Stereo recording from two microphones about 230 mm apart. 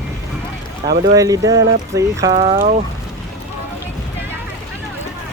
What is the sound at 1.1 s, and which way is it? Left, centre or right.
Speech, centre.